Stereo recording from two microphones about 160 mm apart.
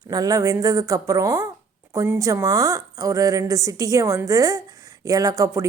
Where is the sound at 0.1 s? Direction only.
25° right (ahead or behind).